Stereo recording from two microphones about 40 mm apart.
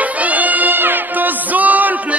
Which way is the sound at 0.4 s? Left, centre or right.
Right.